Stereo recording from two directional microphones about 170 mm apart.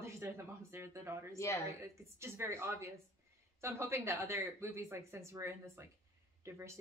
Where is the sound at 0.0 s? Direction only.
15° right (ahead or behind).